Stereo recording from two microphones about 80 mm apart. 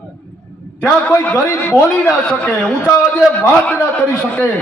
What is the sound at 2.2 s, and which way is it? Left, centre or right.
A man's voice, centre.